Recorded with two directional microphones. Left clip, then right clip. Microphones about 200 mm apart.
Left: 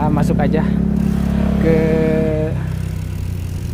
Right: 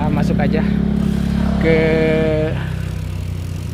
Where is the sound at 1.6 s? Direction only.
5° left (ahead or behind).